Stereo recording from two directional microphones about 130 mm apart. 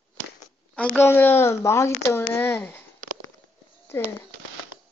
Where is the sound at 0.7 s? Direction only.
15° left (ahead or behind).